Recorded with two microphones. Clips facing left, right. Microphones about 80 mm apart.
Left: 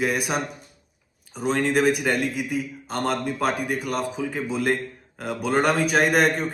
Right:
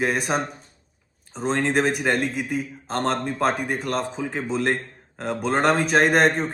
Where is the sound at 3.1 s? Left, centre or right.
Right.